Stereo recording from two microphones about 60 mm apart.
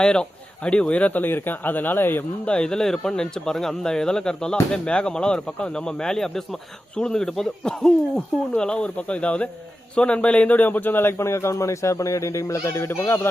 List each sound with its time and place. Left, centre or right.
0.0 s a man's voice: centre
1.2 s speech: left
2.4 s a man's voice: centre; by 13.2 s left